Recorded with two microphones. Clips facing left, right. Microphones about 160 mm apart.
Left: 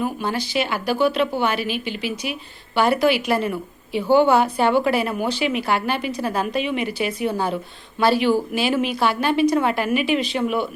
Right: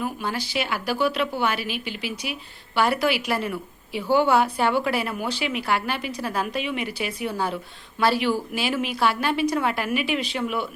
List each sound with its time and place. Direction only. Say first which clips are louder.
0.0 s speech: left 4 dB; 5° right (ahead or behind)